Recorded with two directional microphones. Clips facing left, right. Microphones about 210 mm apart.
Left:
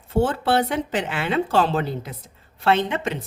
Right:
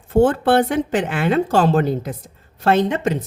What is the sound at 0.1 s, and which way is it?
A woman's voice, 50° right (ahead or behind).